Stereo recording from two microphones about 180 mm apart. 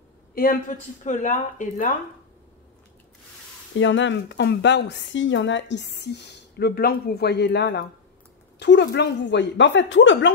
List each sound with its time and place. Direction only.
0.3 s speech: 55° left (ahead or behind)
3.7 s a woman's voice: 90° left